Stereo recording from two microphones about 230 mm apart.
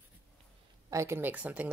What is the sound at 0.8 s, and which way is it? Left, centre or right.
Speech, centre.